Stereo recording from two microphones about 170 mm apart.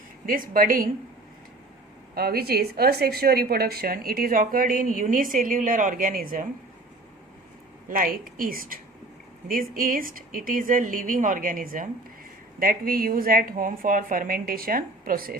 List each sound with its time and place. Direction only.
0.3 s a woman's voice: 55° right (ahead or behind)
2.1 s a woman's voice: 65° right (ahead or behind)
7.9 s a woman's voice: 55° right (ahead or behind)